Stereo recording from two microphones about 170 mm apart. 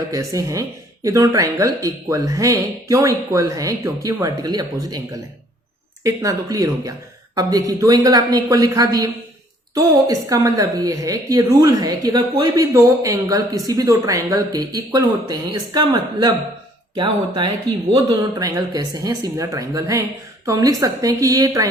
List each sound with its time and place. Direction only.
0.1 s speech: 20° right (ahead or behind)